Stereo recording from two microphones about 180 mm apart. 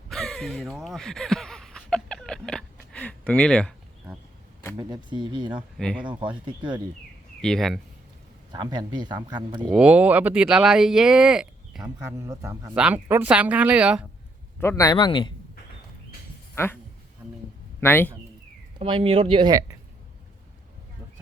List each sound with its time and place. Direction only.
0.1 s a sound: centre (ahead or behind)
4.8 s speech: 20° right (ahead or behind)
5.5 s speech: centre (ahead or behind)
6.1 s speech: 25° right (ahead or behind)
7.4 s speech: 5° left (ahead or behind)
8.5 s speech: 25° right (ahead or behind)
9.7 s speech: 5° right (ahead or behind)
12.2 s speech: 15° right (ahead or behind)
12.7 s speech: 5° right (ahead or behind)
14.6 s speech: 15° left (ahead or behind)
16.6 s speech: 15° left (ahead or behind)
17.2 s a sound: 10° right (ahead or behind)
17.7 s a man's voice: 10° left (ahead or behind)
18.8 s speech: 30° right (ahead or behind)